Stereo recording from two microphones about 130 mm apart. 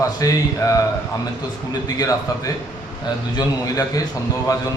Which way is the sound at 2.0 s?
25° left (ahead or behind).